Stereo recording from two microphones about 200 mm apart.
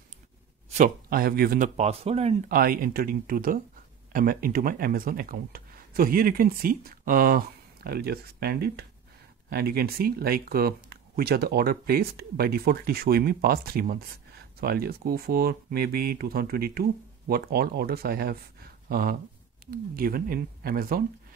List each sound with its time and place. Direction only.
0.7 s speech: 45° right (ahead or behind)
1.8 s speech: 30° right (ahead or behind)
2.4 s speech: 45° right (ahead or behind)